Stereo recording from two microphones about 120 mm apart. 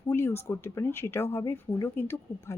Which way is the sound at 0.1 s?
20° left (ahead or behind).